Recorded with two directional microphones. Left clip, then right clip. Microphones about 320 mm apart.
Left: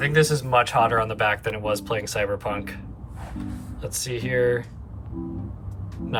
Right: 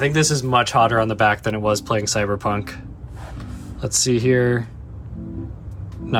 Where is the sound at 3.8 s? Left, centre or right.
Centre.